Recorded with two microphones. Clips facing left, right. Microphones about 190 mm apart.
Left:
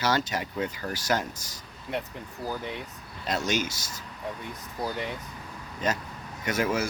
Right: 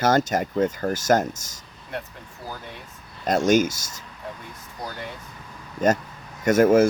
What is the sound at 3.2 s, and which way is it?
Speech, 50° right (ahead or behind).